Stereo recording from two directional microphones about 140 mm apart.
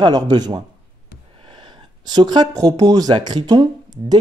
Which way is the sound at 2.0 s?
30° right (ahead or behind).